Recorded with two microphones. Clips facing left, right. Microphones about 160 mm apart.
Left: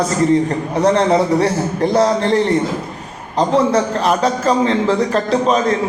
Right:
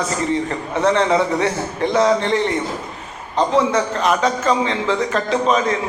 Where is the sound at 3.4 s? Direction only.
35° left (ahead or behind).